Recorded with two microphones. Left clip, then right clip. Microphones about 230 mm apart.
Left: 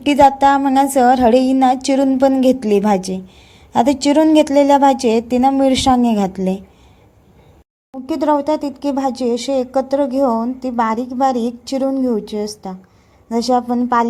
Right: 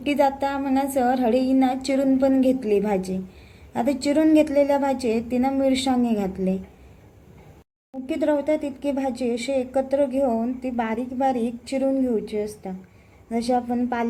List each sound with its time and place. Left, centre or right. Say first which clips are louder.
0.1 s a woman's voice: left 11 dB; left
8.0 s a woman's voice: left 6 dB; left
13.5 s a woman's voice: left 7 dB; left
13.7 s a woman's voice: left 10 dB; left